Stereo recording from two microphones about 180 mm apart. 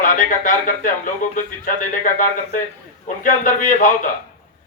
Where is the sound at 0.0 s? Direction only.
45° left (ahead or behind).